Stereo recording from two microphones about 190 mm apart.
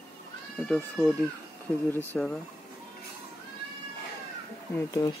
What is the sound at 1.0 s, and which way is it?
Speech, 10° left (ahead or behind).